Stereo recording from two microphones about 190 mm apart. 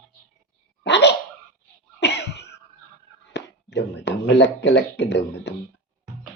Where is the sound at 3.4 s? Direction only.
65° left (ahead or behind).